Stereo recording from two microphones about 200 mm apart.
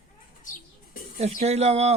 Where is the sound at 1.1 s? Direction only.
30° right (ahead or behind).